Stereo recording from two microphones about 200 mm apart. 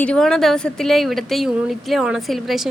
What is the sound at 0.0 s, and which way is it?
A woman's voice, 5° left (ahead or behind).